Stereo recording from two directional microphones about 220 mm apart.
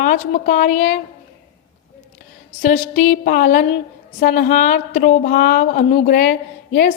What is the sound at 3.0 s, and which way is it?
Speech, 40° left (ahead or behind).